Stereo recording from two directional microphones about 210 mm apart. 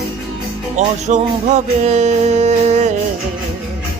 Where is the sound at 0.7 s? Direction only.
35° right (ahead or behind).